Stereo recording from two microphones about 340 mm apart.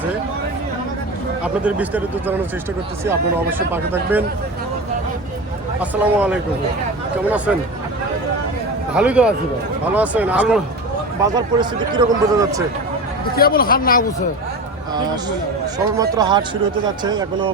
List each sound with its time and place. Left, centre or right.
1.6 s speech: centre
3.7 s speech: centre
5.8 s speech: centre
9.0 s speech: centre
13.3 s speech: left
16.0 s speech: centre